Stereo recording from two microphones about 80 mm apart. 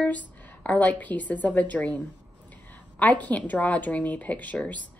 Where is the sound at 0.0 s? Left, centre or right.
Centre.